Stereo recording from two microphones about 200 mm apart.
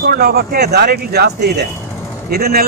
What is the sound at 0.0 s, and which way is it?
A man's voice, 50° right (ahead or behind).